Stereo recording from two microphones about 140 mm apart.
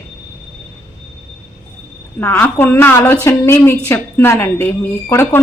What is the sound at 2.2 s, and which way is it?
A woman's voice, 15° left (ahead or behind).